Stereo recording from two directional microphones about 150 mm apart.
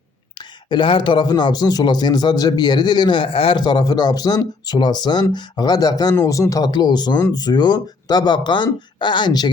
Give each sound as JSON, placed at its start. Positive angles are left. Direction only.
{"t": 0.3, "sound": "a man's voice", "side_deg": 30}